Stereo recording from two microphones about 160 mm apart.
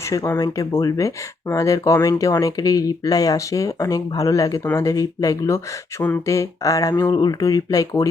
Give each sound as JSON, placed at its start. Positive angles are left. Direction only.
{"t": 0.1, "sound": "speech", "side_deg": 20}